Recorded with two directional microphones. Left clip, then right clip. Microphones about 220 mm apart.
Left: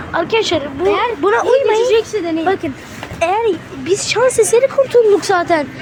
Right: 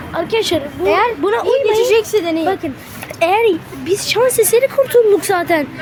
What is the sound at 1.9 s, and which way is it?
Speech, 25° right (ahead or behind).